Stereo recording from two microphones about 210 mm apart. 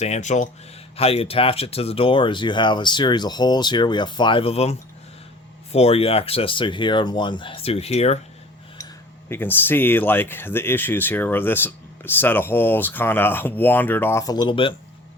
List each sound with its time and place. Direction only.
0.0 s speech: 35° left (ahead or behind)
9.3 s speech: 10° left (ahead or behind)